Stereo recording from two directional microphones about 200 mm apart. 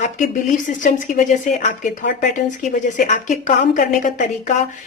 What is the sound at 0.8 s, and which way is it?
A woman's voice, 40° left (ahead or behind).